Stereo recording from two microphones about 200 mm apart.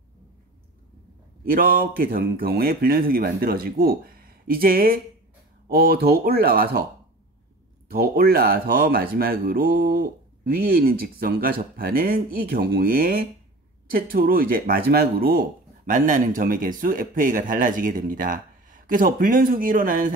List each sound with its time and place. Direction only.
1.5 s speech: 45° right (ahead or behind)
7.9 s speech: 50° right (ahead or behind)